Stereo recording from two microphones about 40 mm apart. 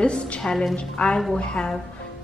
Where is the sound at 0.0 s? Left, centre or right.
Left.